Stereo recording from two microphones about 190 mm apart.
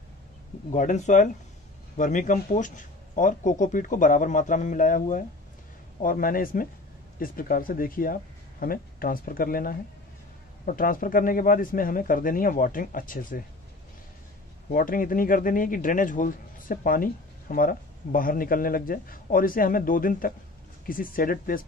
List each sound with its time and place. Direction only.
0.7 s a man's voice: 40° left (ahead or behind)
14.7 s a man's voice: 45° left (ahead or behind)